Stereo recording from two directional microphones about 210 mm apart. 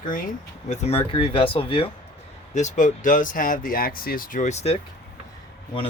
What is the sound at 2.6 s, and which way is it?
Speech, 35° left (ahead or behind).